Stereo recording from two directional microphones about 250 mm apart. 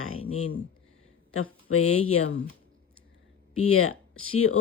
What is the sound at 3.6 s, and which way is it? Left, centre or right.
Speech, left.